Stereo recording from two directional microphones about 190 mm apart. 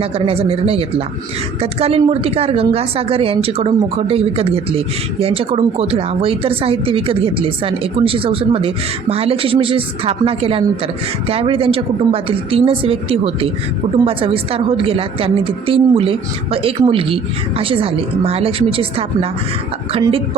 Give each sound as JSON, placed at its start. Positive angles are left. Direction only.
{"t": 0.0, "sound": "a woman's voice", "side_deg": -30}